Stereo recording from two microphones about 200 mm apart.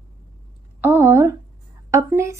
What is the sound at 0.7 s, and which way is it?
A woman's voice, 10° right (ahead or behind).